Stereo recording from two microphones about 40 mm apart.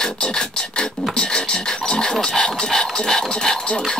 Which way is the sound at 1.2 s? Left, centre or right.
Centre.